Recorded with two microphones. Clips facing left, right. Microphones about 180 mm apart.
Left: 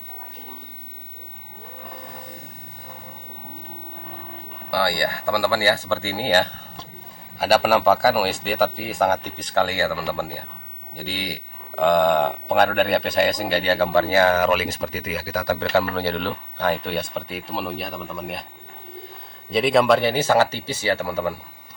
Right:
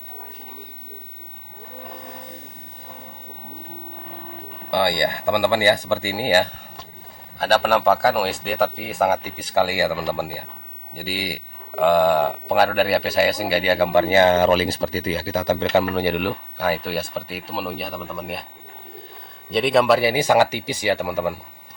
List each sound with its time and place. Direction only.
4.7 s speech: 20° right (ahead or behind)
7.3 s speech: 10° left (ahead or behind)
19.5 s speech: centre (ahead or behind)